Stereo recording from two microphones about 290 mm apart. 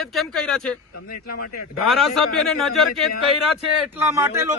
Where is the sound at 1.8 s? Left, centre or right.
Centre.